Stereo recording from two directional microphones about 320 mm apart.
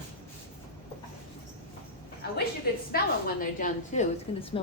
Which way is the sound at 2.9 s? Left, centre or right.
Left.